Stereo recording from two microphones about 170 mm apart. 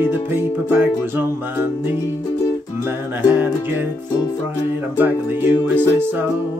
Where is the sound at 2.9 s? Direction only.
10° right (ahead or behind).